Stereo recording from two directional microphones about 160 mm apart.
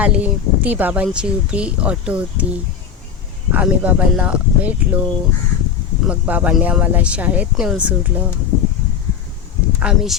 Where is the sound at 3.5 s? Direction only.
10° right (ahead or behind).